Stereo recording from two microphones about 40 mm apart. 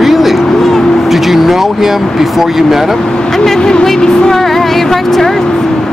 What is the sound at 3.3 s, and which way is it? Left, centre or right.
Speech, centre.